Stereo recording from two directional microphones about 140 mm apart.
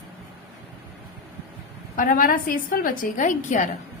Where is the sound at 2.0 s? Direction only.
80° left.